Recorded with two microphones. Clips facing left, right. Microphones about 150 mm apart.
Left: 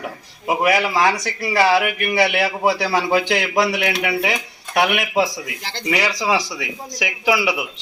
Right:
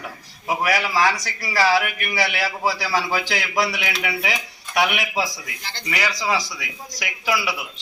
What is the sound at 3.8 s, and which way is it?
Speech, 60° left (ahead or behind).